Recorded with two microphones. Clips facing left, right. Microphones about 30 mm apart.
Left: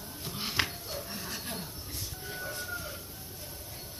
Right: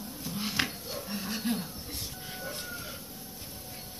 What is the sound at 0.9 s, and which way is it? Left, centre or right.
Dog, centre.